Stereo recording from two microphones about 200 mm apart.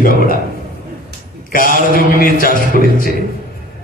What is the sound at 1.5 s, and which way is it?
A man's voice, 45° left (ahead or behind).